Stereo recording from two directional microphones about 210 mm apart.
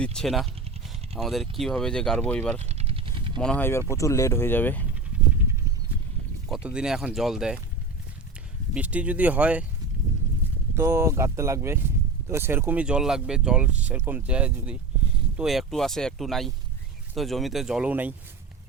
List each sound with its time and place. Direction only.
0.0 s speech: 5° left (ahead or behind)
2.6 s vehicle: 30° right (ahead or behind)
3.4 s speech: 10° left (ahead or behind)
6.5 s speech: 5° right (ahead or behind)
8.7 s speech: 5° right (ahead or behind)
10.8 s speech: 15° right (ahead or behind)